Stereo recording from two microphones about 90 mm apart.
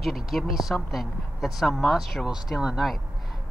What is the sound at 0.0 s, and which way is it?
Speech, centre (ahead or behind).